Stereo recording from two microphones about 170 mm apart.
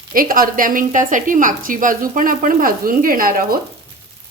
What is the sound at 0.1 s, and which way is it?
A woman's voice, 55° right (ahead or behind).